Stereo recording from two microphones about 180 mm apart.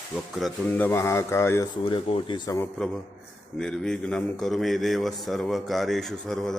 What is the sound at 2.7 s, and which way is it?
A man's voice, 5° left (ahead or behind).